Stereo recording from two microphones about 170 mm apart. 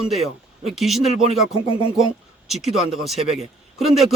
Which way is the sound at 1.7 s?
35° left (ahead or behind).